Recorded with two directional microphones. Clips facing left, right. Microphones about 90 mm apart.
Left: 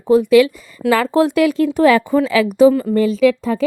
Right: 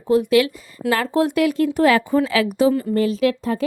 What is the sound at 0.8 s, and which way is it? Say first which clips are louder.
Speech: left 5 dB; 90° left.